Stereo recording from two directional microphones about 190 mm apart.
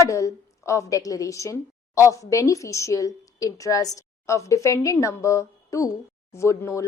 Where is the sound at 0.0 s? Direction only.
15° left (ahead or behind).